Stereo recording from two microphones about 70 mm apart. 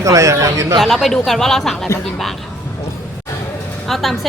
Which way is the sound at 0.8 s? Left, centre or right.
Centre.